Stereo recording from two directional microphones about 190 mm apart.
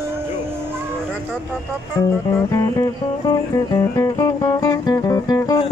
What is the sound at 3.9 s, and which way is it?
Music, 20° left (ahead or behind).